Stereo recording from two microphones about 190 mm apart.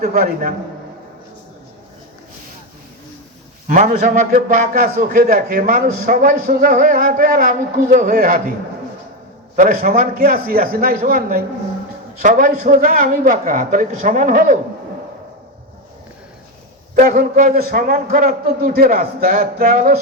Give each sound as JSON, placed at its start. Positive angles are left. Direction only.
{"t": 0.0, "sound": "a man's voice", "side_deg": -50}
{"t": 3.7, "sound": "a man's voice", "side_deg": -40}
{"t": 9.6, "sound": "a man's voice", "side_deg": -45}
{"t": 16.9, "sound": "a man's voice", "side_deg": -40}